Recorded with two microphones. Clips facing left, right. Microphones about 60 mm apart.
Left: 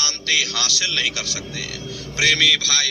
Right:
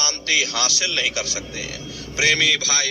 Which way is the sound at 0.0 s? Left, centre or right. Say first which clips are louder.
Right 1 dB; centre.